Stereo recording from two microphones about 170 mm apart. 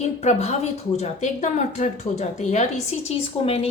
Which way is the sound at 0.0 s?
40° left (ahead or behind).